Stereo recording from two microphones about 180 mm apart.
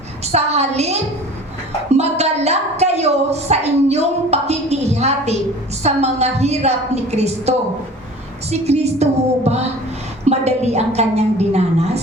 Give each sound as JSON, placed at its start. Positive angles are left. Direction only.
{"t": 0.3, "sound": "a woman's voice", "side_deg": -35}
{"t": 2.0, "sound": "a sound", "side_deg": -35}
{"t": 5.8, "sound": "a woman's voice", "side_deg": -35}